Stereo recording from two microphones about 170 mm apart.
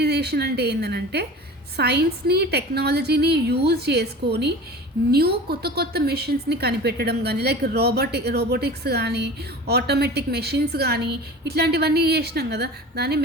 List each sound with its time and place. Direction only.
0.0 s a woman's voice: 75° right (ahead or behind)